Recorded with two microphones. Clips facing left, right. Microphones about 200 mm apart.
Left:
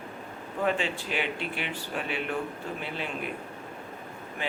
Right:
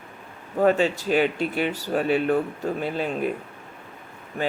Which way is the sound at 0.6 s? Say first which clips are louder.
Right 9 dB; 40° right (ahead or behind).